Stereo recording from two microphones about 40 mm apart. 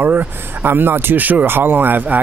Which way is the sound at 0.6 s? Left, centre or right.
Right.